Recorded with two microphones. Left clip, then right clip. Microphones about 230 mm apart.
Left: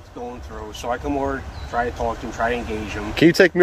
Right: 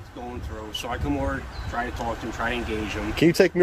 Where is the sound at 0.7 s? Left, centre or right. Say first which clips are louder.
Left 5 dB; centre.